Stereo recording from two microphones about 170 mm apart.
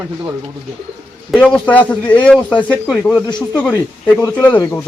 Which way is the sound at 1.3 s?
5° left (ahead or behind).